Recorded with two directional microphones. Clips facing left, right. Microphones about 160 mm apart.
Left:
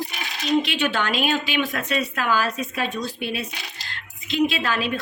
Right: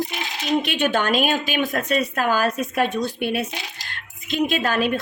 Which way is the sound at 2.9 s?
20° right (ahead or behind).